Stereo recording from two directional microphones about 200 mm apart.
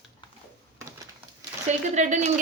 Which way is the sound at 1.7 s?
35° right (ahead or behind).